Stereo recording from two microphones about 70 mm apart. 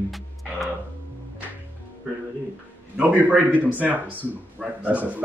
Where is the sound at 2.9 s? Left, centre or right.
Right.